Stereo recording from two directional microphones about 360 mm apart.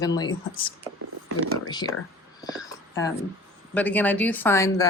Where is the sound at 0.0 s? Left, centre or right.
Centre.